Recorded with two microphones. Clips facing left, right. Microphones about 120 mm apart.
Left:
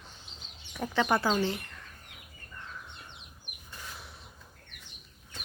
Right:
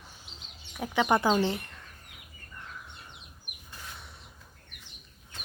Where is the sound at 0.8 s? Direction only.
15° right (ahead or behind).